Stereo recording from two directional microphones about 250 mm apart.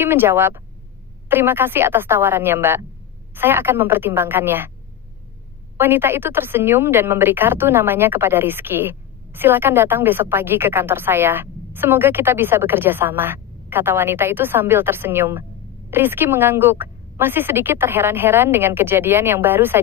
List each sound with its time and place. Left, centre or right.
0.0 s a woman's voice: centre
5.8 s a woman's voice: centre